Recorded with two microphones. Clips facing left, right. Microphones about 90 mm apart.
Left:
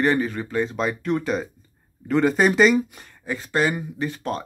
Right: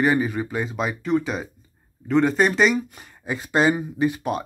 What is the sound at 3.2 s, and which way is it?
Speech, 20° right (ahead or behind).